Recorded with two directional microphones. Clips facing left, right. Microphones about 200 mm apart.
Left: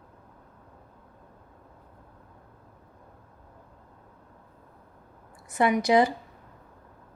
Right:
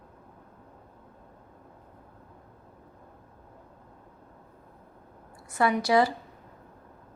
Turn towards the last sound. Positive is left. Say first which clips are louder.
# left 2 dB
turn(degrees=20)  # may be behind; listen again after turning